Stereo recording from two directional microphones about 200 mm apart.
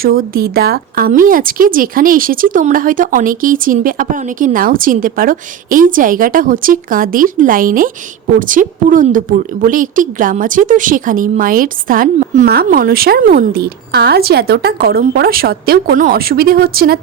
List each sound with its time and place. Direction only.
0.0 s a woman's voice: 50° right (ahead or behind)